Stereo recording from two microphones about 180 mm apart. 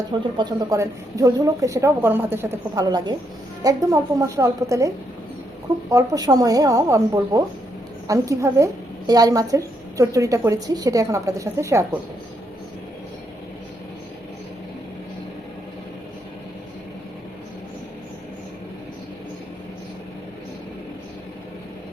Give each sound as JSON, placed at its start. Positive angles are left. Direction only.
{"t": 0.1, "sound": "a woman's voice", "side_deg": -25}
{"t": 5.9, "sound": "a woman's voice", "side_deg": -20}